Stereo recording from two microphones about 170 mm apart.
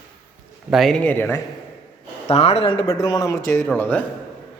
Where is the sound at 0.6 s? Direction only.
Centre (ahead or behind).